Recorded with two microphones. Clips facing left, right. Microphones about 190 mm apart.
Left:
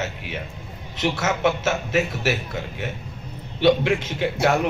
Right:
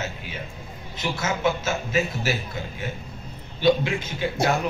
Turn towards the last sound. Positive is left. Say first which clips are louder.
# left 3 dB
turn(degrees=70)  # may be behind; listen again after turning